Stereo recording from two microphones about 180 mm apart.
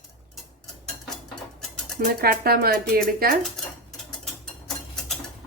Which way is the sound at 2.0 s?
55° right (ahead or behind).